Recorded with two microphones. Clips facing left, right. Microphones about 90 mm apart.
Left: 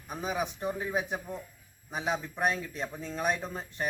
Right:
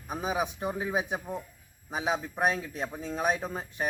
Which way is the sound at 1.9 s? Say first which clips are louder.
Right 2 dB; 10° right (ahead or behind).